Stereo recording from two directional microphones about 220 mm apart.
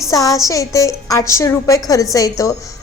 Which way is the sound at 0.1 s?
15° left (ahead or behind).